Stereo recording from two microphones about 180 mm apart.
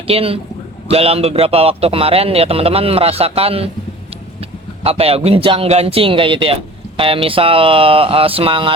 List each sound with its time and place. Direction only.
0.1 s speech: 30° right (ahead or behind)